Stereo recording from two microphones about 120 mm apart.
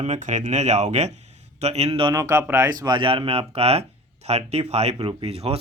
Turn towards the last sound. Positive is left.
turn(degrees=-60)  # may be behind; listen again after turning